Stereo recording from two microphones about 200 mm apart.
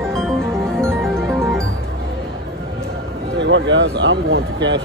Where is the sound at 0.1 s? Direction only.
5° left (ahead or behind).